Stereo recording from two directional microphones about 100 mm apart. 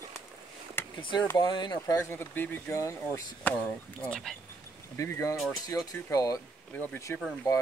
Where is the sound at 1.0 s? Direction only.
50° left (ahead or behind).